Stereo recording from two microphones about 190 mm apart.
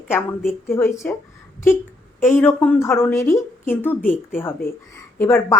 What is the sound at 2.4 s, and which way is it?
A woman's voice, 10° left (ahead or behind).